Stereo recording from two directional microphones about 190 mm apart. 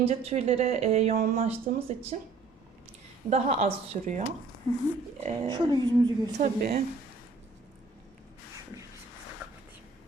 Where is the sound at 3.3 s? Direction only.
35° right (ahead or behind).